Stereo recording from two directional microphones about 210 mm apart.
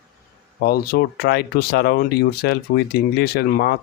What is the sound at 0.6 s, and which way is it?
Speech, 45° left (ahead or behind).